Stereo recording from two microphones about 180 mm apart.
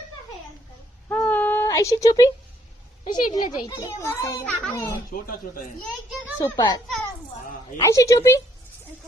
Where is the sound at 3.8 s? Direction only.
15° left (ahead or behind).